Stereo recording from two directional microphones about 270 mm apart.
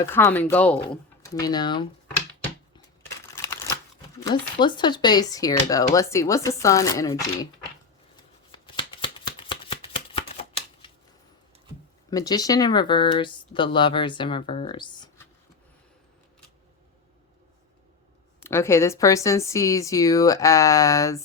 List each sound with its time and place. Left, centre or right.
0.0 s speech: centre
4.2 s a sound: centre
4.6 s speech: centre
8.6 s shuffling cards: centre
12.1 s speech: centre
18.4 s speech: centre